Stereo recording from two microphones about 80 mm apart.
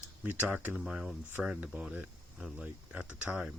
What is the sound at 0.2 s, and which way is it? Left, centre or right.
Speech, centre.